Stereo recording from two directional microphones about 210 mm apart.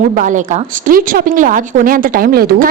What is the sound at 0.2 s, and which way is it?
A woman's voice, 35° right (ahead or behind).